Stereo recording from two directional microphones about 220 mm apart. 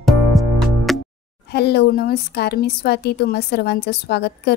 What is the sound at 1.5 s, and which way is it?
Speech, 50° left (ahead or behind).